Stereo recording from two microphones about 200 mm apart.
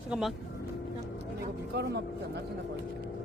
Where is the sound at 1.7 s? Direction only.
55° right (ahead or behind).